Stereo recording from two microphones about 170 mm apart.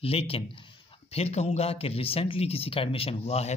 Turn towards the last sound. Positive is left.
turn(degrees=40)  # may be behind; listen again after turning